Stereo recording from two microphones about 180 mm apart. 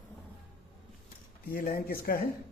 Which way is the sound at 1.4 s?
50° left (ahead or behind).